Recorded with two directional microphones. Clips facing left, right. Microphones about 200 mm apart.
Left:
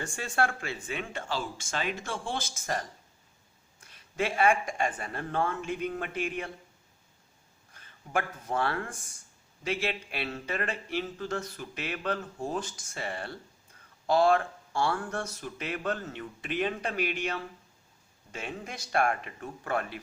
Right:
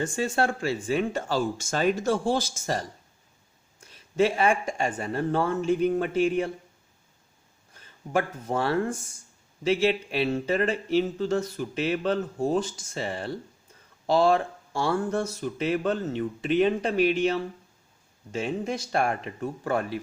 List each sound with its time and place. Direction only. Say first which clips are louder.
0.1 s speech: right 5 dB; 25° right (ahead or behind)
4.4 s speech: right 2 dB; 25° right (ahead or behind)
7.7 s speech: right 5 dB; 30° right (ahead or behind)